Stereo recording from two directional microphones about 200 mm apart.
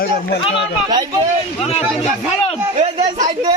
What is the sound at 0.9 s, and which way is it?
Speech, 20° right (ahead or behind).